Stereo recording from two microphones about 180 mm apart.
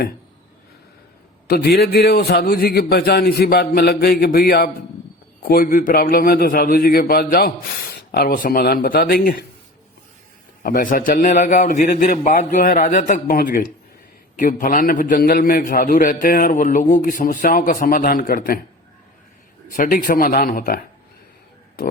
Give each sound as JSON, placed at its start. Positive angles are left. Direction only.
{"t": 1.5, "sound": "a man's voice", "side_deg": 60}
{"t": 10.6, "sound": "a man's voice", "side_deg": 50}
{"t": 19.7, "sound": "a man's voice", "side_deg": 50}